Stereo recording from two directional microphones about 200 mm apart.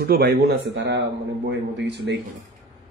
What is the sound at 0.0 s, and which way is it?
Speech, 50° right (ahead or behind).